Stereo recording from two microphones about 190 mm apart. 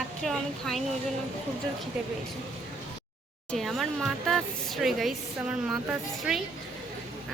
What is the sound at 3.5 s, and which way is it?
Speech, centre (ahead or behind).